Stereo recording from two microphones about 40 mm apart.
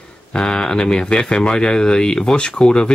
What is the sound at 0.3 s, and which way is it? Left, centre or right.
Speech, left.